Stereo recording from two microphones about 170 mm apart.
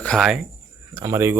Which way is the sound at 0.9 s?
15° right (ahead or behind).